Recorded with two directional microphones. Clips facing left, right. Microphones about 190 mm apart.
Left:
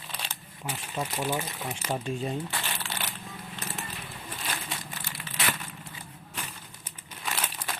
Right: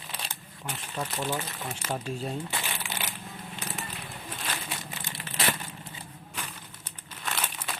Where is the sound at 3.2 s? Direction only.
Centre (ahead or behind).